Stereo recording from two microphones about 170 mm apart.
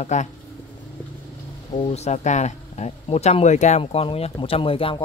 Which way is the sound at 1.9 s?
40° left (ahead or behind).